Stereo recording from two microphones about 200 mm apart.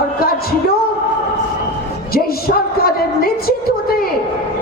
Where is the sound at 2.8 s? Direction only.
50° left (ahead or behind).